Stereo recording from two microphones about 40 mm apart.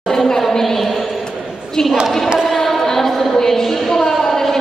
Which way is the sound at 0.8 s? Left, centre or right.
Centre.